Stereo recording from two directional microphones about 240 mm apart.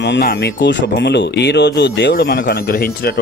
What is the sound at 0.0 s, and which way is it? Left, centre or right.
Speech, left.